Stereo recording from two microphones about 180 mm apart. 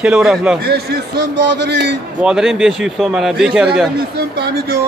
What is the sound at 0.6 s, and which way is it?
Speech, 60° right (ahead or behind).